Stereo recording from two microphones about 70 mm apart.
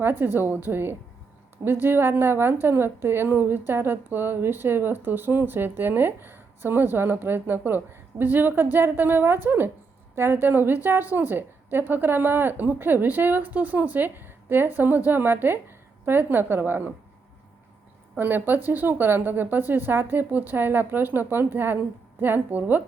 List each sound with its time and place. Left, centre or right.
0.0 s a woman's voice: right
18.2 s a woman's voice: right